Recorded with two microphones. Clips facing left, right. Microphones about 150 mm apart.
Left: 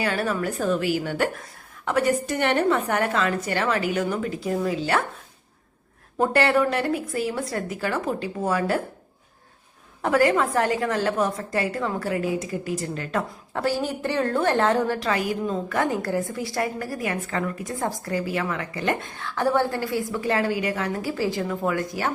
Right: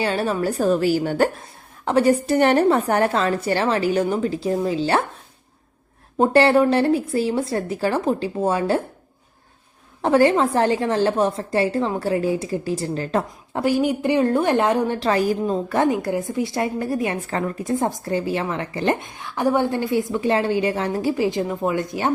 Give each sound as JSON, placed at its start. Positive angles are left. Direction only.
{"t": 0.0, "sound": "a woman's voice", "side_deg": -25}
{"t": 6.1, "sound": "a woman's voice", "side_deg": -30}
{"t": 10.0, "sound": "a woman's voice", "side_deg": -30}
{"t": 13.5, "sound": "a woman's voice", "side_deg": -15}
{"t": 14.9, "sound": "a woman's voice", "side_deg": -30}
{"t": 15.9, "sound": "a woman's voice", "side_deg": -20}
{"t": 18.9, "sound": "a woman's voice", "side_deg": -15}